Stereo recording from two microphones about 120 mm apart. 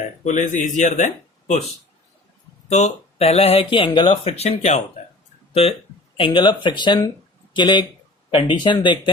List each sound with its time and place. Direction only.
0.3 s speech: 90° left
2.6 s speech: 70° left (ahead or behind)
5.6 s speech: 55° left (ahead or behind)
6.1 s speech: 45° left (ahead or behind)